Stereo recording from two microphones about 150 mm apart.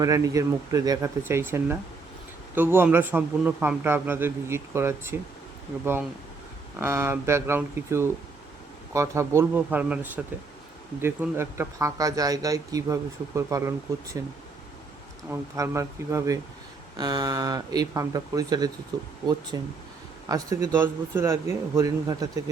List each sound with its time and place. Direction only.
0.0 s a man's voice: 20° right (ahead or behind)
15.3 s speech: 20° right (ahead or behind)